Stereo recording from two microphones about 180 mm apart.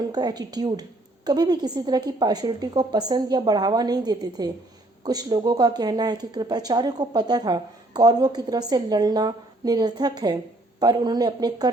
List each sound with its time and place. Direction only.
0.0 s speech: 20° right (ahead or behind)